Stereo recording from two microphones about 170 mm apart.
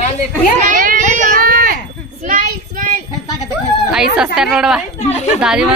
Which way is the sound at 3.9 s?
5° right (ahead or behind).